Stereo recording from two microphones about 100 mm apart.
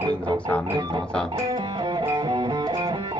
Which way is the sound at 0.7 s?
55° right (ahead or behind).